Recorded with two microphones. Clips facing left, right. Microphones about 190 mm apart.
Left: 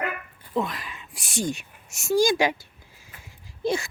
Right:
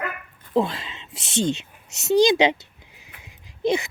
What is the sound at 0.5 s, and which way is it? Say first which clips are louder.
A woman's voice: right 5 dB; 30° right (ahead or behind).